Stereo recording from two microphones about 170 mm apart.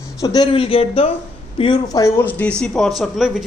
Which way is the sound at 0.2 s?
25° left (ahead or behind).